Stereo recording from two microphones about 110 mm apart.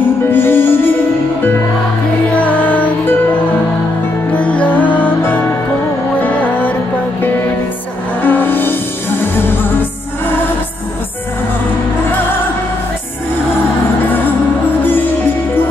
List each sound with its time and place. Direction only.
0.3 s music: 20° left (ahead or behind)
2.4 s music: 15° left (ahead or behind)
8.2 s music: 15° left (ahead or behind)
14.8 s music: 20° left (ahead or behind)